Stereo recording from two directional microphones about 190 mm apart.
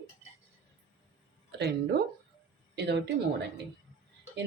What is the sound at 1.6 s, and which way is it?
Speech, 60° right (ahead or behind).